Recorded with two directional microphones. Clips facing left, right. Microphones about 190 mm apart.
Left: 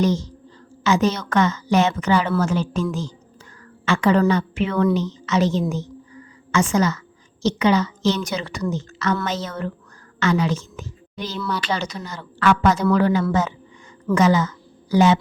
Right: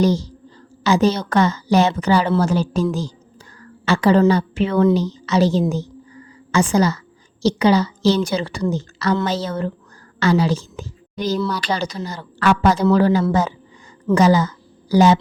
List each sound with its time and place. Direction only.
0.0 s a woman's voice: 35° right (ahead or behind)
3.6 s whispering: 35° right (ahead or behind)
4.2 s a woman's voice: 35° right (ahead or behind)